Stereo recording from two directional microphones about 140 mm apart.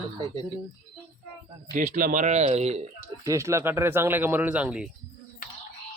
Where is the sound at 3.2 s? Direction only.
20° right (ahead or behind).